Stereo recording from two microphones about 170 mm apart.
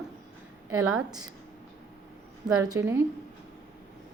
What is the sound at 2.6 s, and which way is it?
Speech, 15° right (ahead or behind).